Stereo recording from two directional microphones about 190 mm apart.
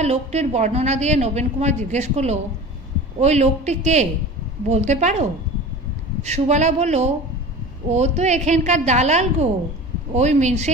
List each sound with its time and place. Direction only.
0.0 s a woman's voice: 35° right (ahead or behind)
6.2 s a woman's voice: 35° right (ahead or behind)